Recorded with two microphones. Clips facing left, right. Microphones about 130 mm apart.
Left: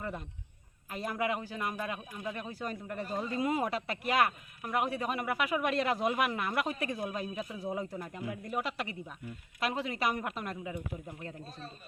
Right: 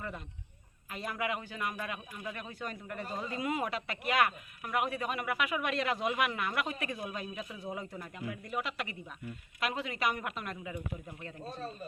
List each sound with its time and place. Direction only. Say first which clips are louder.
0.9 s a man's voice: left 3 dB; 35° left (ahead or behind)